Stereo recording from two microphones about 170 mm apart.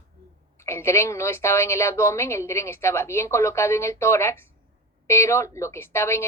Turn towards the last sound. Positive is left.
turn(degrees=15)  # may be behind; listen again after turning